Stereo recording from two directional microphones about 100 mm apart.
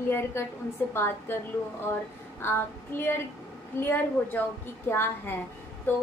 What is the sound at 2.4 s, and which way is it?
A woman's voice, 25° left (ahead or behind).